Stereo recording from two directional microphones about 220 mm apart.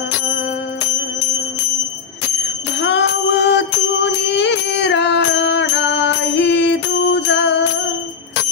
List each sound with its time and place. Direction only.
2.8 s music: 55° left (ahead or behind)